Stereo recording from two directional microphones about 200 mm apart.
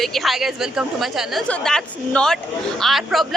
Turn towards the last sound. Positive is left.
turn(degrees=0)  # may be behind; listen again after turning